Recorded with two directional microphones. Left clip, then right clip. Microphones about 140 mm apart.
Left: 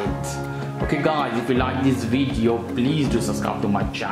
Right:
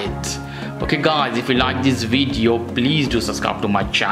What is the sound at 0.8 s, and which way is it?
Speech, 25° right (ahead or behind).